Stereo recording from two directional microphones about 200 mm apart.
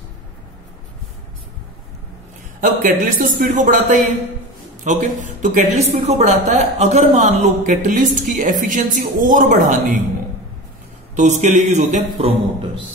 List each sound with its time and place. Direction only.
2.6 s a woman's voice: 45° right (ahead or behind)
11.1 s a woman's voice: 35° right (ahead or behind)